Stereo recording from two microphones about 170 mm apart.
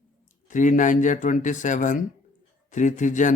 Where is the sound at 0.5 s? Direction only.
50° left (ahead or behind).